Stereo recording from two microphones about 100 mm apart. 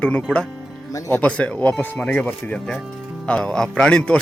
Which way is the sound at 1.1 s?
15° left (ahead or behind).